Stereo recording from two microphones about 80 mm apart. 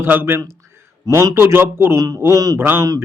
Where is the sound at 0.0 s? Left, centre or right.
Right.